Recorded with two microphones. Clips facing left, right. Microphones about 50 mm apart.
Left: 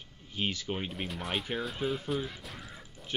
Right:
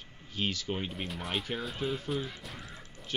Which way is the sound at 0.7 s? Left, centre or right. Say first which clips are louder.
Even; centre.